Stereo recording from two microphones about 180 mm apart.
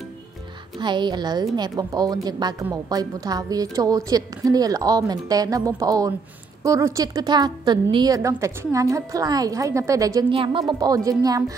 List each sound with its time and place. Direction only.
0.7 s a woman's voice: 25° right (ahead or behind)
10.3 s a woman's voice: 30° right (ahead or behind)